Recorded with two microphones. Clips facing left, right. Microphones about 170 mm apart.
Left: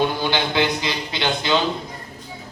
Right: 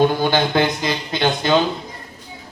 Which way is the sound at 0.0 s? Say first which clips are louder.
Right 5 dB; 50° right (ahead or behind).